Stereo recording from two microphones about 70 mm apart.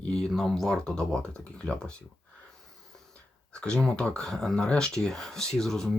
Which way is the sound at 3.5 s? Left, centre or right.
Centre.